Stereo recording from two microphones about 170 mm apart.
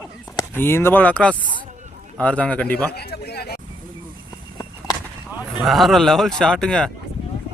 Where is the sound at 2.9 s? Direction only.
70° left (ahead or behind).